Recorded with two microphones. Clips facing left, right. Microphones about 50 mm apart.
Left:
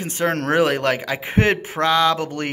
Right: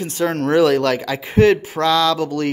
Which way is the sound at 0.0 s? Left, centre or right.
Left.